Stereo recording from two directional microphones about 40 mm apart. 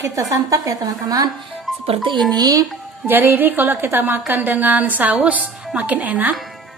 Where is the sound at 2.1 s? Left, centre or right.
Centre.